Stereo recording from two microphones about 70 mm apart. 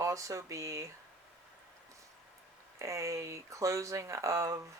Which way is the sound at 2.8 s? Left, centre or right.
Right.